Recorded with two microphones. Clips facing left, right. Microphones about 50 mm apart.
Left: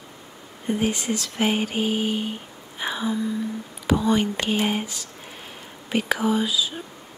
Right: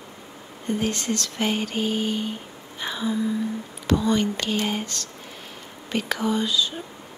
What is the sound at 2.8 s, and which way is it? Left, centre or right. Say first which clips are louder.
Music: left 1 dB; centre.